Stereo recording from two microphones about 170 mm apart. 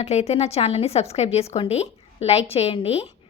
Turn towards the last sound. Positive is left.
turn(degrees=35)  # may be behind; listen again after turning